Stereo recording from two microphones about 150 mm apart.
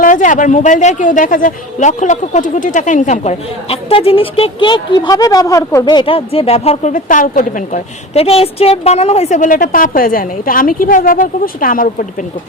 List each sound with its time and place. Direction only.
0.0 s a woman's voice: 60° left (ahead or behind); by 5.8 s 20° left (ahead or behind)
5.8 s speech: 30° left (ahead or behind)
6.9 s a woman's voice: 60° left (ahead or behind)
8.1 s a woman's voice: 40° left (ahead or behind); by 12.0 s 65° left (ahead or behind)